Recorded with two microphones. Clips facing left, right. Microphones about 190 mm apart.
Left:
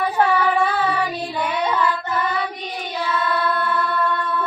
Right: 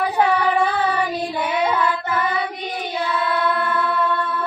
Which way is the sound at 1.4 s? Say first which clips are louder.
Even; 5° right (ahead or behind).